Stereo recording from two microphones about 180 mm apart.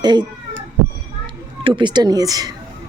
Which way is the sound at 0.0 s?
25° right (ahead or behind).